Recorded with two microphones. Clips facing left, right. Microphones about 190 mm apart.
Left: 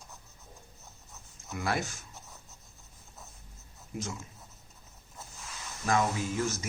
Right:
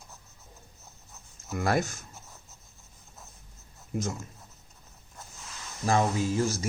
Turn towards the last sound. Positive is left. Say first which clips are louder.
# right 5 dB
turn(degrees=-35)  # may be behind; listen again after turning